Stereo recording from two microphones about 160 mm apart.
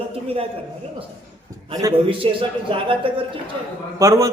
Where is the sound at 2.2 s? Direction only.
35° right (ahead or behind).